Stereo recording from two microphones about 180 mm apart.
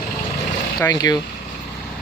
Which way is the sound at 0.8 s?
20° left (ahead or behind).